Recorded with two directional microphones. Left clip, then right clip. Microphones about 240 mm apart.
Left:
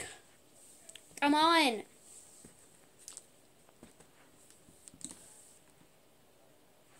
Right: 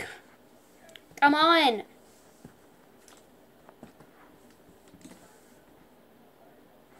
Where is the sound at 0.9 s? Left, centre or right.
Left.